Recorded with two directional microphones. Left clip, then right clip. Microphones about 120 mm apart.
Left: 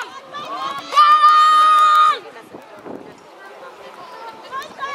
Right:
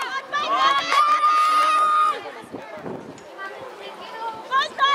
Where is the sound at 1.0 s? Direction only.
15° right (ahead or behind).